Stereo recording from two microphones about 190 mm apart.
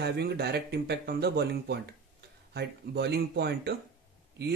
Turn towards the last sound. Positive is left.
turn(degrees=-60)  # may be behind; listen again after turning